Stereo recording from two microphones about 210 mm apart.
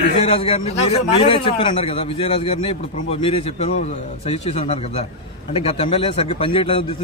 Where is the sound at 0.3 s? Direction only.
25° left (ahead or behind).